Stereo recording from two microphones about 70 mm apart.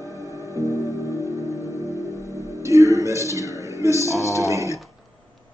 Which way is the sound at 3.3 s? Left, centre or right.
Right.